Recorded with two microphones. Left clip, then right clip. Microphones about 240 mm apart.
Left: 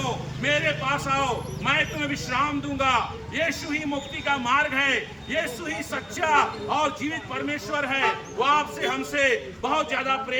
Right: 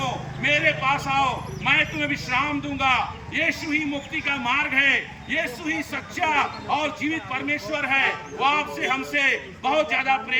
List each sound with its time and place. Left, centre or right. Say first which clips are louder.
0.4 s a man's voice: right 3 dB; centre